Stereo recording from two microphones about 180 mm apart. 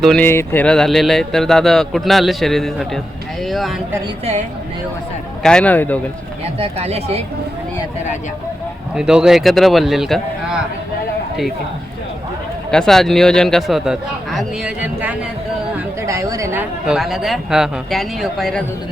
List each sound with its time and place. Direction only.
0.0 s speech: centre (ahead or behind)
5.4 s a man's voice: 5° left (ahead or behind)
6.6 s speech: 35° right (ahead or behind)
9.0 s speech: 5° right (ahead or behind)
12.7 s speech: 5° left (ahead or behind)
16.0 s speech: 15° right (ahead or behind); by 18.6 s centre (ahead or behind)